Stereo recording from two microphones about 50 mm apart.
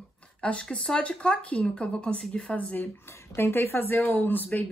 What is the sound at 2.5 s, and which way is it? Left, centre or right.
Speech, left.